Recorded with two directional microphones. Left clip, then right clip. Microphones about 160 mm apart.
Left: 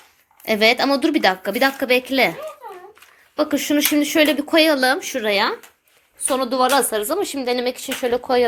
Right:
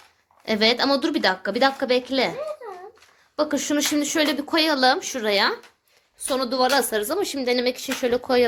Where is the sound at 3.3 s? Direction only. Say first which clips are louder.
Left 3 dB; centre (ahead or behind).